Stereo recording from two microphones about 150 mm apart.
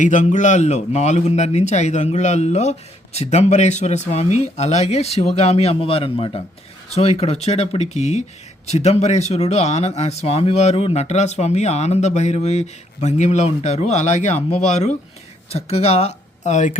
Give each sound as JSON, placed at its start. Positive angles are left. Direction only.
{"t": 0.0, "sound": "speech", "side_deg": 55}